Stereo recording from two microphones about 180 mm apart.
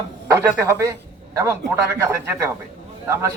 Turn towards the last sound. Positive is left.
turn(degrees=-15)  # may be behind; listen again after turning